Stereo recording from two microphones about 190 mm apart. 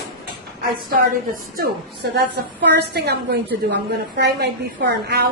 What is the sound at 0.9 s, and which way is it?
A woman's voice, 50° right (ahead or behind).